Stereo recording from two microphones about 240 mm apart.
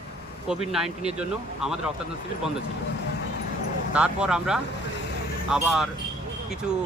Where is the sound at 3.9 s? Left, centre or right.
Centre.